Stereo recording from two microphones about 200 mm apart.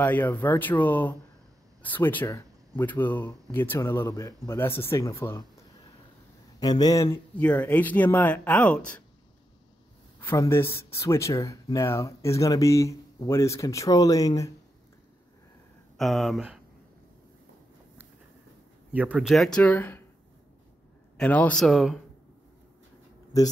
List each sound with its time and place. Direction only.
0.0 s speech: 10° left (ahead or behind)
6.6 s speech: 20° left (ahead or behind)
7.3 s speech: 5° left (ahead or behind)
10.2 s speech: 15° left (ahead or behind)
16.0 s speech: centre (ahead or behind)
18.9 s speech: 5° right (ahead or behind)
21.2 s speech: 5° left (ahead or behind)